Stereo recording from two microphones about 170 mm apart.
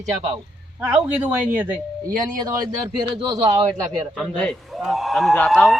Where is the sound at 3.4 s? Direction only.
20° right (ahead or behind).